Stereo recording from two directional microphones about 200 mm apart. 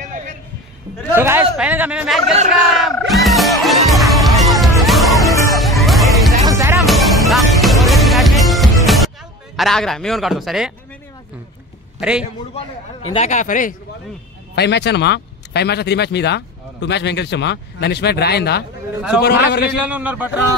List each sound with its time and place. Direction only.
0.0 s music: 40° right (ahead or behind)
1.1 s speech: 10° right (ahead or behind)
2.7 s music: centre (ahead or behind)
5.3 s music: 15° left (ahead or behind)
5.6 s music: centre (ahead or behind)
6.4 s music: 15° right (ahead or behind)
6.9 s music: centre (ahead or behind)
9.6 s a man's voice: centre (ahead or behind)
12.0 s a man's voice: 5° right (ahead or behind)
12.5 s a man's voice: 30° left (ahead or behind)
14.5 s a man's voice: 55° left (ahead or behind)
19.7 s a man's voice: 5° right (ahead or behind)